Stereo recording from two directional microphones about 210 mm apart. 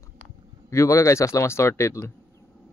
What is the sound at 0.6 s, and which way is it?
Speech, 15° left (ahead or behind).